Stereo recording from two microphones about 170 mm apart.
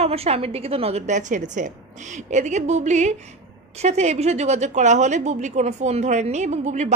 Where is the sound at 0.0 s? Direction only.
35° right (ahead or behind).